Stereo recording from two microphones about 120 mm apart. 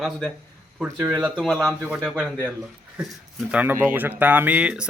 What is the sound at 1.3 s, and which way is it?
Speech, 10° left (ahead or behind).